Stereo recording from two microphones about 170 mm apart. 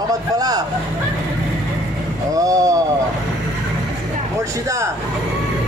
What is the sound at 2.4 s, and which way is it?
Speech, 20° right (ahead or behind).